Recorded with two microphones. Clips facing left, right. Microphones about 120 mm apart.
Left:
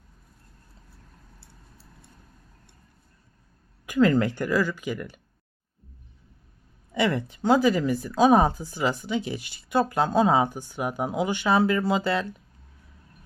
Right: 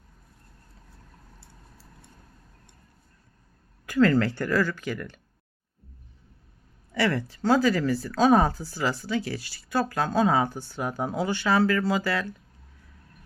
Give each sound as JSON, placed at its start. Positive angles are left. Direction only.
{"t": 3.8, "sound": "speech", "side_deg": 15}
{"t": 6.9, "sound": "speech", "side_deg": 20}